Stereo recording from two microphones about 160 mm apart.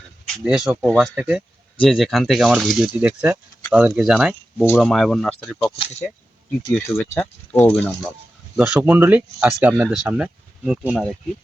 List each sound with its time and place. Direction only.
0.4 s speech: 5° right (ahead or behind)
5.7 s speech: 35° left (ahead or behind)
6.8 s speech: 15° left (ahead or behind)
8.5 s speech: 5° right (ahead or behind)